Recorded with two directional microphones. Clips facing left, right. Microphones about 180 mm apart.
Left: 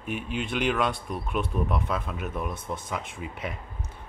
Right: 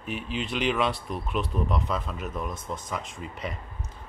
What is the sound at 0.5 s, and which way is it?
Speech, centre (ahead or behind).